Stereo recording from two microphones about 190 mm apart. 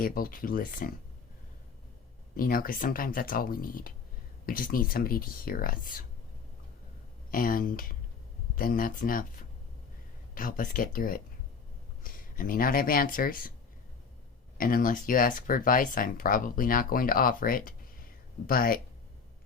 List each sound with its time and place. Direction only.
0.0 s speech: 50° left (ahead or behind)
2.3 s speech: 50° left (ahead or behind)
7.3 s speech: 50° left (ahead or behind)
14.6 s speech: 50° left (ahead or behind)